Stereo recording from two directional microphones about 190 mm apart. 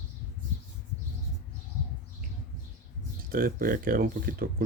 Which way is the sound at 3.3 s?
50° right (ahead or behind).